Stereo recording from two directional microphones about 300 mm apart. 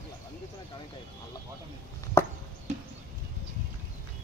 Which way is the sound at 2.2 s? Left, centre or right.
Centre.